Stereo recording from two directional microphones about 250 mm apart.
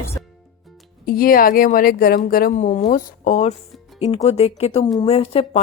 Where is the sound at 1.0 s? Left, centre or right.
Left.